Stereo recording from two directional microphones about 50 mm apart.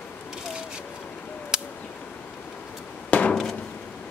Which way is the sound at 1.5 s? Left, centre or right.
Centre.